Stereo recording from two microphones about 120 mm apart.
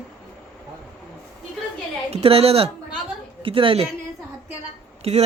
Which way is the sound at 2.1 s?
55° right (ahead or behind).